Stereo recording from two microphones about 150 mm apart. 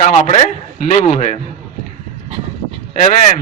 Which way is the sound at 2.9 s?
55° left (ahead or behind).